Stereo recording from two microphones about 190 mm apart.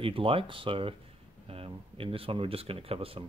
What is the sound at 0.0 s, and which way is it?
Speech, 30° right (ahead or behind).